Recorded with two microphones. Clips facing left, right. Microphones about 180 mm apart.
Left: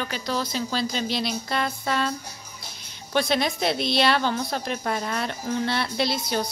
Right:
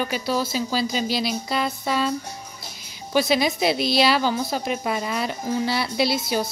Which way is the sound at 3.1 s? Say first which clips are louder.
Right 3 dB; 5° right (ahead or behind).